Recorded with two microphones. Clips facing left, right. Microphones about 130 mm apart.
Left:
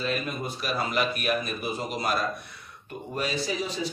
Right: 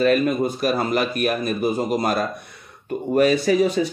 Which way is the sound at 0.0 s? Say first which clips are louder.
Right 12 dB; 50° right (ahead or behind).